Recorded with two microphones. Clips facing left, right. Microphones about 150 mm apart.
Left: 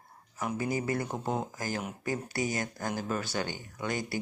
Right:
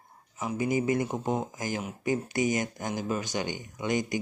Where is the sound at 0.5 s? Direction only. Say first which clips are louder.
Right 5 dB; 15° right (ahead or behind).